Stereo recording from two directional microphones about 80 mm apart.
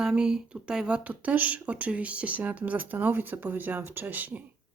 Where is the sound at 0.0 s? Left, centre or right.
Centre.